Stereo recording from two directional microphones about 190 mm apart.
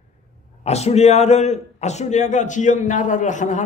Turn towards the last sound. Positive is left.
turn(degrees=40)  # may be behind; listen again after turning